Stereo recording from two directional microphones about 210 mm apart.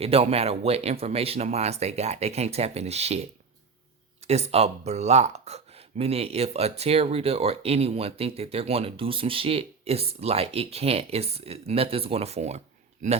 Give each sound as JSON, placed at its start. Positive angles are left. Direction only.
{"t": 0.0, "sound": "speech", "side_deg": -30}
{"t": 4.3, "sound": "speech", "side_deg": -30}